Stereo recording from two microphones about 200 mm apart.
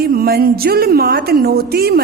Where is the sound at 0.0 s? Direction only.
50° right (ahead or behind).